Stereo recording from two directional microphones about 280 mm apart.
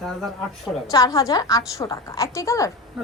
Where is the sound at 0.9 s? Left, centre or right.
Centre.